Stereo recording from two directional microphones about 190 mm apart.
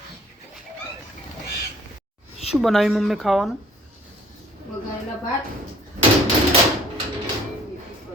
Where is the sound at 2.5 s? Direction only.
Centre (ahead or behind).